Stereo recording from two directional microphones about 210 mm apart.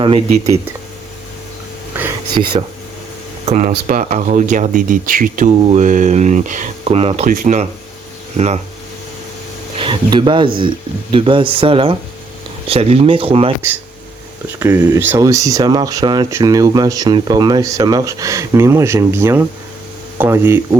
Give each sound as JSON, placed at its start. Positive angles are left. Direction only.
{"t": 0.0, "sound": "speech", "side_deg": -25}
{"t": 2.3, "sound": "speech", "side_deg": -20}
{"t": 3.4, "sound": "speech", "side_deg": -35}
{"t": 9.7, "sound": "speech", "side_deg": -25}
{"t": 14.6, "sound": "speech", "side_deg": -10}